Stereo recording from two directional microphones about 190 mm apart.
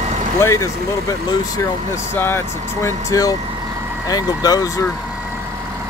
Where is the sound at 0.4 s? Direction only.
15° left (ahead or behind).